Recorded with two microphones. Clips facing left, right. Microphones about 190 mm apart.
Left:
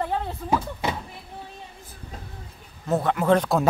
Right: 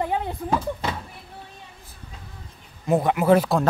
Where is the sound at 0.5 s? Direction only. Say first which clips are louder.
Left 1 dB; 10° left (ahead or behind).